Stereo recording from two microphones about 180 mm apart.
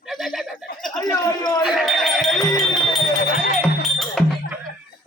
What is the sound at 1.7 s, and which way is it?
Sheep, centre (ahead or behind).